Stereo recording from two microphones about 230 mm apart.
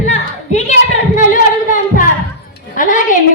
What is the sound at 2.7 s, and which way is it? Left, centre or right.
Speech, left.